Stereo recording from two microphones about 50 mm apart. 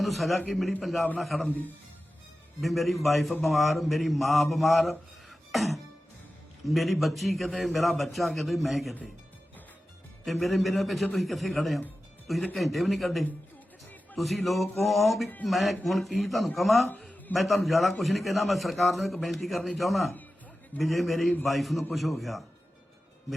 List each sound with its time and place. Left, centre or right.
0.0 s a man's voice: centre
1.5 s speech: left
2.6 s a man's voice: centre
5.5 s music: centre
6.7 s a man's voice: centre
10.2 s a man's voice: centre